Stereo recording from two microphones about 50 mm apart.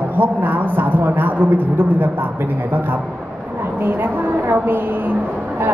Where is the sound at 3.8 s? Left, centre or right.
Right.